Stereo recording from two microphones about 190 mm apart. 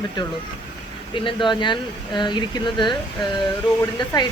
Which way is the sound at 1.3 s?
25° left (ahead or behind).